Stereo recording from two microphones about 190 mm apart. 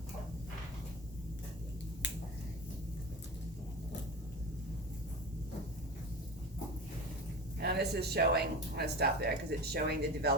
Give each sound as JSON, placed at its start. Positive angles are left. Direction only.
{"t": 7.6, "sound": "speech", "side_deg": -60}